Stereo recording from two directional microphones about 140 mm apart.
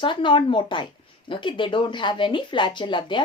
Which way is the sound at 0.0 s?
35° left (ahead or behind).